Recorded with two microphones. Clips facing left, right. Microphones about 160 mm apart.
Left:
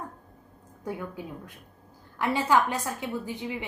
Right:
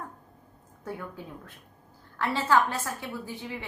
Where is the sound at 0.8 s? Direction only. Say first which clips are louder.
Left 3 dB; 15° left (ahead or behind).